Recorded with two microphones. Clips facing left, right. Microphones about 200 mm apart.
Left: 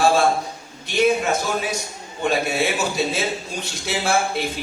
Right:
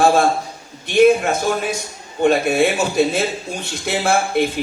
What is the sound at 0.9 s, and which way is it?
Speech, 55° right (ahead or behind).